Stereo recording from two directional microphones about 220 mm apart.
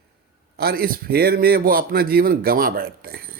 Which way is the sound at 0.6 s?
45° right (ahead or behind).